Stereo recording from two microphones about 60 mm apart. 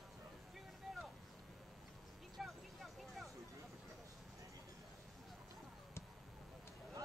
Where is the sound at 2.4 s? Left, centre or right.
Centre.